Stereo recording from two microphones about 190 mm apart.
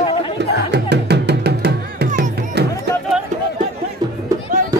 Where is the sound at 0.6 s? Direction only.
60° right (ahead or behind).